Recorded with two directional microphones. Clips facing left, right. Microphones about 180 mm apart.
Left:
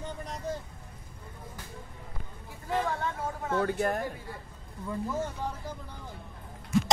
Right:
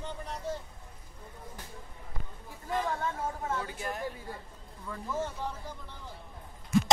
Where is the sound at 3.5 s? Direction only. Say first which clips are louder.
Left 9 dB; 55° left (ahead or behind).